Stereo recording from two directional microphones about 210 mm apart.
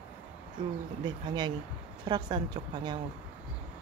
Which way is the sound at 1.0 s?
20° right (ahead or behind).